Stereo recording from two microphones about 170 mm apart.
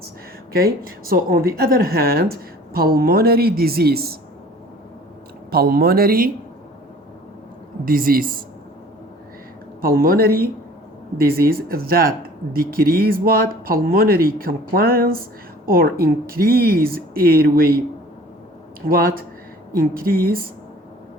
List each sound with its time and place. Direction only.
0.5 s speech: 60° right (ahead or behind)
5.5 s speech: 65° right (ahead or behind)
7.9 s speech: 60° right (ahead or behind)
9.8 s speech: 60° right (ahead or behind)
18.9 s speech: 60° right (ahead or behind)